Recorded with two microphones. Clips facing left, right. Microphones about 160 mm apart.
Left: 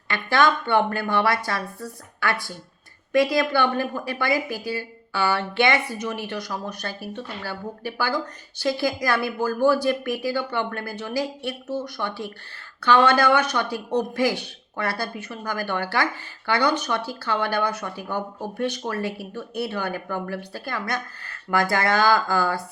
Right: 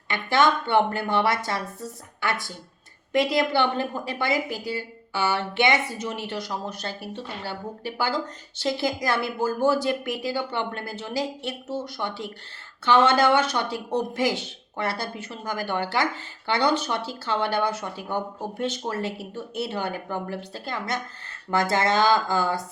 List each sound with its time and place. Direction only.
0.1 s a woman's voice: 20° right (ahead or behind)